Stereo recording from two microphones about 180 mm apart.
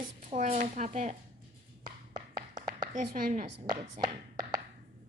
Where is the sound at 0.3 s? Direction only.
40° right (ahead or behind).